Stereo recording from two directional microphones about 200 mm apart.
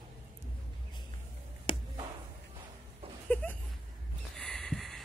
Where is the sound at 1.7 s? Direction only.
25° left (ahead or behind).